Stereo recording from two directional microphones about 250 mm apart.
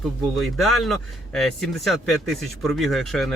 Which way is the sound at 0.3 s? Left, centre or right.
Centre.